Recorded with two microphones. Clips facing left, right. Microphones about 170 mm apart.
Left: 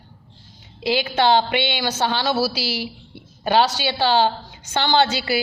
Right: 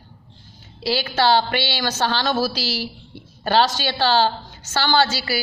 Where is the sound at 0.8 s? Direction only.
20° left (ahead or behind).